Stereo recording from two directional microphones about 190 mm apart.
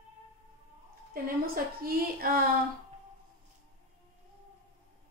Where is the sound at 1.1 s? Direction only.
50° right (ahead or behind).